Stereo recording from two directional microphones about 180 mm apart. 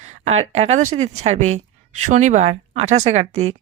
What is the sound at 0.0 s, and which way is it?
Speech, 40° right (ahead or behind).